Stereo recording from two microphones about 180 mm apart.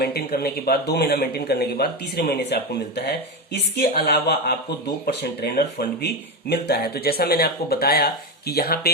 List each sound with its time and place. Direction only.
0.0 s speech: 60° left (ahead or behind)